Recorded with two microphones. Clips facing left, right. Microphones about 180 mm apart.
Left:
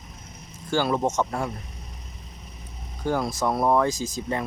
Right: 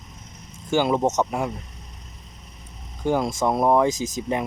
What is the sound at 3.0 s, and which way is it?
Speech, 20° right (ahead or behind).